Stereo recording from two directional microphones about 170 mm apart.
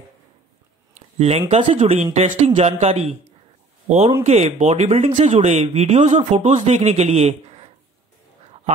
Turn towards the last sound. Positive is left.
turn(degrees=-35)  # may be behind; listen again after turning